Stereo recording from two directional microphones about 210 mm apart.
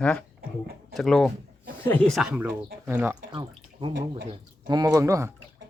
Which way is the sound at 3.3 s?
25° right (ahead or behind).